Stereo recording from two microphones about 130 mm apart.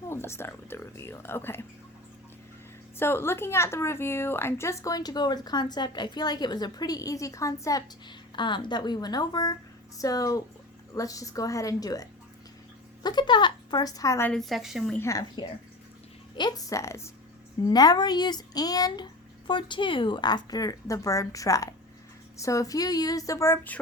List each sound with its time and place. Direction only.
0.1 s a woman's voice: 20° left (ahead or behind)
3.0 s a woman's voice: 20° left (ahead or behind)
8.4 s a child's voice: 35° left (ahead or behind)
14.3 s a woman's voice: centre (ahead or behind)
14.9 s a woman's voice: 25° left (ahead or behind)